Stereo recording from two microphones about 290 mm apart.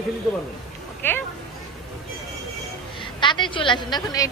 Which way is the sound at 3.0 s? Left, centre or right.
Centre.